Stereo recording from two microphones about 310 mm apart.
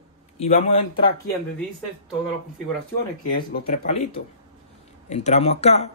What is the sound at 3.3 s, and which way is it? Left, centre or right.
Speech, left.